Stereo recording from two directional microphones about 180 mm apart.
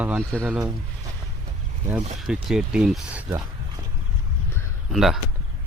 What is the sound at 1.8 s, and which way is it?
Speech, 5° right (ahead or behind).